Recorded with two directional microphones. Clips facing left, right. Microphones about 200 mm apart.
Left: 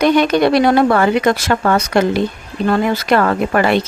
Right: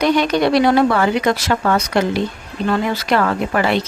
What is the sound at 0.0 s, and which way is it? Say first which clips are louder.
Speech: left 3 dB; 55° left (ahead or behind).